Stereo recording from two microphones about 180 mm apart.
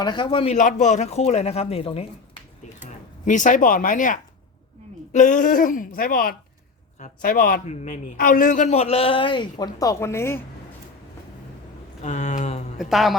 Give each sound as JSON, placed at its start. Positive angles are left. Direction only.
{"t": 0.0, "sound": "speech", "side_deg": 25}
{"t": 2.8, "sound": "speech", "side_deg": 45}
{"t": 7.7, "sound": "speech", "side_deg": 40}
{"t": 8.1, "sound": "a man's voice", "side_deg": 50}
{"t": 12.0, "sound": "a sound", "side_deg": 40}
{"t": 12.8, "sound": "a woman's voice", "side_deg": 0}